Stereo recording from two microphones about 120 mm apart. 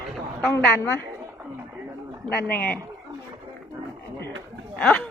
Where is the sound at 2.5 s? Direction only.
15° left (ahead or behind).